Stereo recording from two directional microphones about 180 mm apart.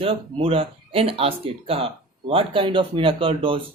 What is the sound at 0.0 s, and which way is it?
Speech, 30° right (ahead or behind).